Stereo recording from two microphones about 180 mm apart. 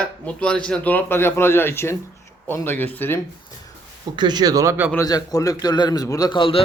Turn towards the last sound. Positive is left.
turn(degrees=30)  # may be behind; listen again after turning